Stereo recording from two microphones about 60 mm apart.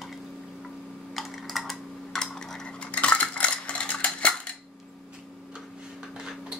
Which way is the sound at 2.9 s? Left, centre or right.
Left.